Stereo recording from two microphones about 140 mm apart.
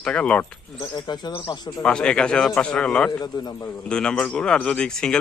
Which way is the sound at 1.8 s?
5° left (ahead or behind).